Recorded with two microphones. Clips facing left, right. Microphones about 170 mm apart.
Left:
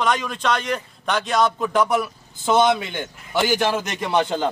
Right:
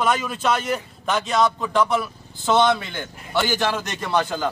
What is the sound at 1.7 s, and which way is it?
A man's voice, 10° left (ahead or behind).